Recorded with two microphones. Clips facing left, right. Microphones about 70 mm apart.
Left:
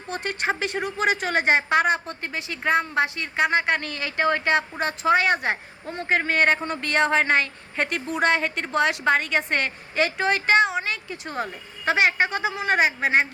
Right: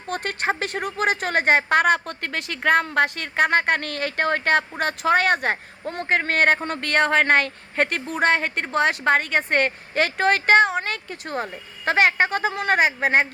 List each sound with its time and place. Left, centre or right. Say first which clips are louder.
0.1 s a woman's voice: right 2 dB; right